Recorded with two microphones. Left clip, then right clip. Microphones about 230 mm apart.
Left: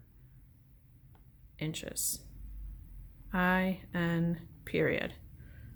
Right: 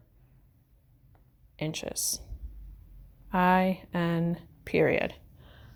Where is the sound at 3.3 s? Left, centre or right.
Right.